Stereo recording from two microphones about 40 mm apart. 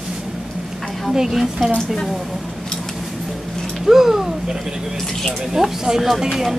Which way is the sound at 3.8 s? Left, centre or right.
Centre.